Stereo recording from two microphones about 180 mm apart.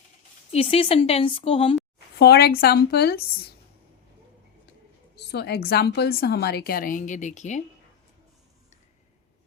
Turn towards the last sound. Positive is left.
turn(degrees=40)  # may be behind; listen again after turning